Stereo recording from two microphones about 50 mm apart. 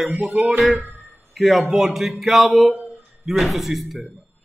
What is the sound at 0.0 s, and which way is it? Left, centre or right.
A man's voice, centre.